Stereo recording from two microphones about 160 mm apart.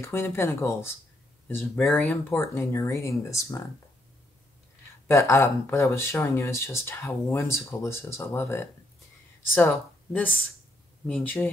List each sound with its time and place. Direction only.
0.0 s speech: 15° left (ahead or behind)
5.0 s speech: 20° left (ahead or behind)